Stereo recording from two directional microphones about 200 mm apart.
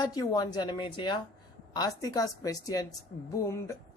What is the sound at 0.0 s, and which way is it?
Speech, 20° left (ahead or behind).